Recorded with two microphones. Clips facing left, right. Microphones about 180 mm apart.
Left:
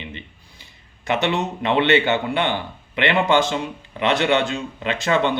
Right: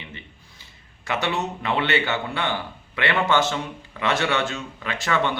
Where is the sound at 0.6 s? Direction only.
20° left (ahead or behind).